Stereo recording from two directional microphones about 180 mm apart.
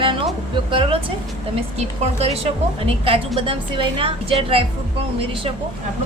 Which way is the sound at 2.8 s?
30° right (ahead or behind).